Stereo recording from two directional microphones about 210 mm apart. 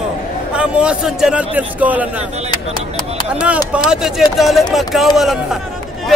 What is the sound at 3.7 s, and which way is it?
A man's voice, 5° right (ahead or behind).